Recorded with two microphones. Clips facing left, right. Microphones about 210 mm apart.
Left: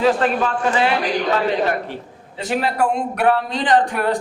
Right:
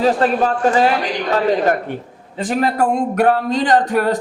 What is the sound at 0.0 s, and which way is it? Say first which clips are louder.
Speech: right 2 dB; 40° right (ahead or behind).